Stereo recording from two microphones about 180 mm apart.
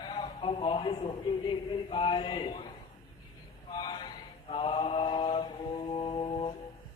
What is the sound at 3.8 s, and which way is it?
Mantra, 25° left (ahead or behind).